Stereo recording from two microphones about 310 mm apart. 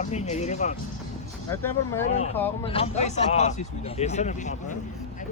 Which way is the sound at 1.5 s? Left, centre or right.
Centre.